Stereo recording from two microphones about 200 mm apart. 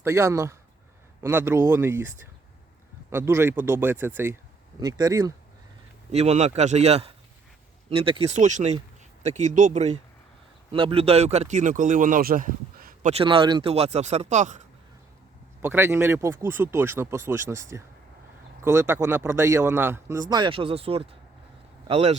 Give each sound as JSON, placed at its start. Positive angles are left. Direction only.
{"t": 0.0, "sound": "speech", "side_deg": -15}
{"t": 6.1, "sound": "speech", "side_deg": -35}
{"t": 10.7, "sound": "speech", "side_deg": -25}
{"t": 15.6, "sound": "speech", "side_deg": -10}
{"t": 20.3, "sound": "speech", "side_deg": -25}